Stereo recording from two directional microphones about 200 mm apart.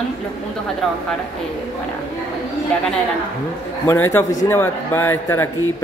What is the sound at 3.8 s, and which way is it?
Speech, 10° left (ahead or behind).